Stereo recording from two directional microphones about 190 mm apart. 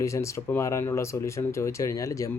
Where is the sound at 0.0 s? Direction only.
15° left (ahead or behind).